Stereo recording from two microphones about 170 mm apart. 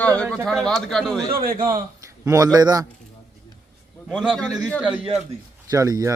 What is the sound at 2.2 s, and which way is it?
Speech, 20° right (ahead or behind).